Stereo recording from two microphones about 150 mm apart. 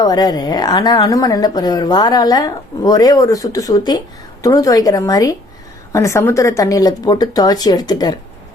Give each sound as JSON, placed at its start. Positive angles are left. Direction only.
{"t": 0.0, "sound": "a woman's voice", "side_deg": 25}